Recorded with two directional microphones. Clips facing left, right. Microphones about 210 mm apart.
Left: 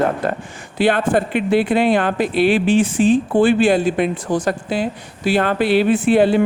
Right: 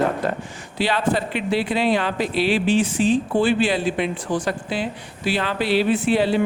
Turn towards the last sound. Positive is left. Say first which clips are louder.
# left 5 dB
turn(degrees=50)  # may be behind; listen again after turning